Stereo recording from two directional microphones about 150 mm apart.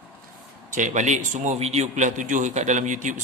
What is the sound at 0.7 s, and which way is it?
A man's voice, 55° right (ahead or behind).